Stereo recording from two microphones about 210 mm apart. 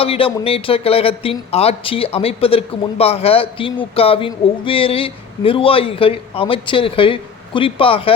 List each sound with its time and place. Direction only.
0.0 s a man's voice: 25° left (ahead or behind)